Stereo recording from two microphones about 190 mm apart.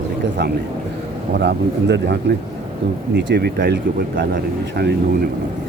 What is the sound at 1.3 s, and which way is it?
Speech, 65° right (ahead or behind).